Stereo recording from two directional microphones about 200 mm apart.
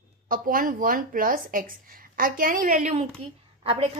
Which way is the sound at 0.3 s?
45° right (ahead or behind).